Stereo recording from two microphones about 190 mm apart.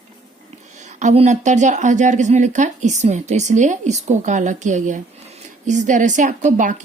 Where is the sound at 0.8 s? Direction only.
40° right (ahead or behind).